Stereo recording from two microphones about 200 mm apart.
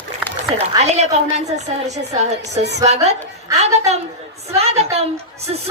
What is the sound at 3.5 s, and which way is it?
A woman's voice, 35° right (ahead or behind).